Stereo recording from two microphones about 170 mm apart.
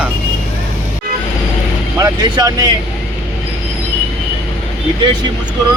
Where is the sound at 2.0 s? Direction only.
20° right (ahead or behind).